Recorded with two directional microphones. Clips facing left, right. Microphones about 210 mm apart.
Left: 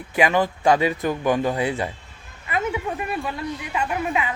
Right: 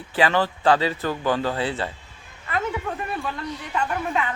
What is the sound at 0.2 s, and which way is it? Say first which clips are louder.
A woman's voice: left 1 dB; 15° left (ahead or behind).